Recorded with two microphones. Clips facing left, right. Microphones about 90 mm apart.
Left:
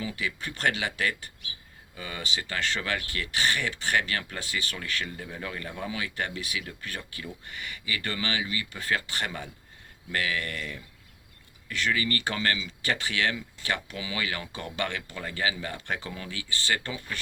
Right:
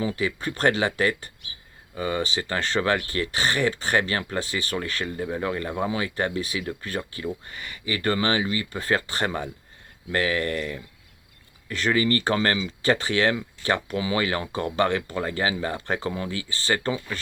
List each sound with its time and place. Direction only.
0.0 s speech: 35° right (ahead or behind)